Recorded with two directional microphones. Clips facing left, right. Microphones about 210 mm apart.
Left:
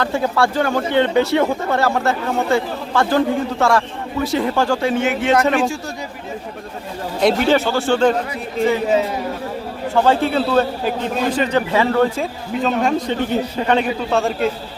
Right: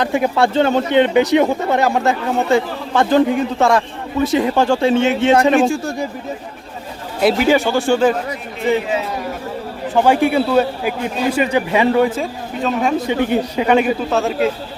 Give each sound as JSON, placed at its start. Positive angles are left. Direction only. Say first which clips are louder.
{"t": 0.0, "sound": "speech", "louder": "right 2 dB", "side_deg": -15}
{"t": 5.5, "sound": "a man's voice", "louder": "right 5 dB", "side_deg": -50}
{"t": 7.2, "sound": "a man's voice", "louder": "right 1 dB", "side_deg": -5}
{"t": 9.9, "sound": "a man's voice", "louder": "right 2 dB", "side_deg": -15}
{"t": 12.1, "sound": "a man's voice", "louder": "even", "side_deg": 0}